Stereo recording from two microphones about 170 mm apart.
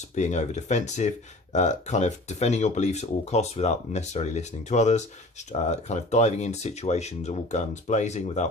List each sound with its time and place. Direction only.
0.2 s speech: 45° left (ahead or behind)